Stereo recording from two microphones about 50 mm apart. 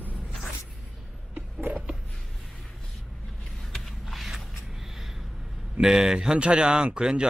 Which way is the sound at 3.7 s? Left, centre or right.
Centre.